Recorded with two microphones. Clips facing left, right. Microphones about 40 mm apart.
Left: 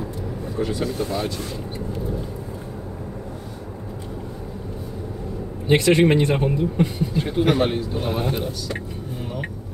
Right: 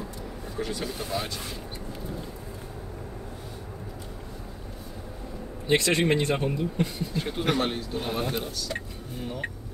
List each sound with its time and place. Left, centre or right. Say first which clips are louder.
0.6 s speech: left 8 dB; centre
5.7 s speech: left 7 dB; left